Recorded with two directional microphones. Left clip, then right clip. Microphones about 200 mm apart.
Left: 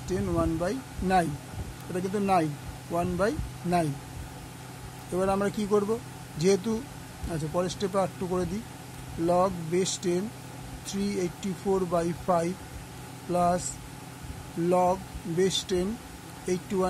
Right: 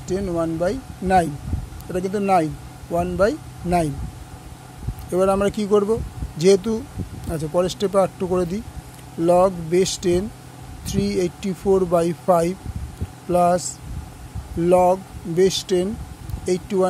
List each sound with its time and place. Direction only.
0.1 s speech: 25° right (ahead or behind)
5.1 s speech: 35° right (ahead or behind)
14.7 s speech: 35° right (ahead or behind)